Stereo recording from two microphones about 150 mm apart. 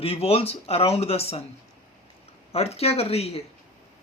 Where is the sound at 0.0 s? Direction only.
40° left (ahead or behind).